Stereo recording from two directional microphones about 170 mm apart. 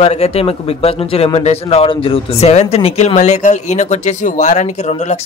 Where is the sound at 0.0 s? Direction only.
40° left (ahead or behind).